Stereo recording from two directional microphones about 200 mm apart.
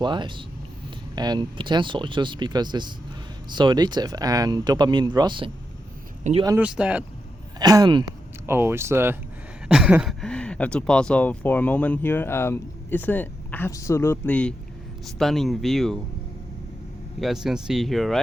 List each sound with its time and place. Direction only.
0.0 s speech: 25° right (ahead or behind)
6.3 s speech: 35° right (ahead or behind)
6.6 s speech: 5° right (ahead or behind)
7.6 s speech: 20° right (ahead or behind); by 16.0 s centre (ahead or behind)
17.2 s speech: centre (ahead or behind)